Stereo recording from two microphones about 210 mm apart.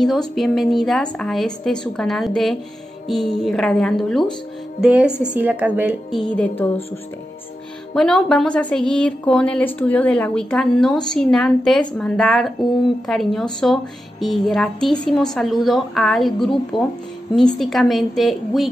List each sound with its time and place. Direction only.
0.0 s a woman's voice: centre (ahead or behind)
6.2 s a woman's voice: 5° left (ahead or behind)
7.9 s a woman's voice: 5° left (ahead or behind)